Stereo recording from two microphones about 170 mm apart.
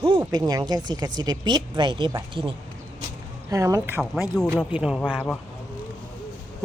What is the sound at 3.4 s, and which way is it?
Speech, 20° right (ahead or behind).